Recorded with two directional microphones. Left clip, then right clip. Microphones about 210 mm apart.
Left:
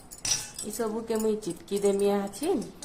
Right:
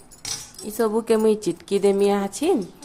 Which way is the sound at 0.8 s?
35° right (ahead or behind).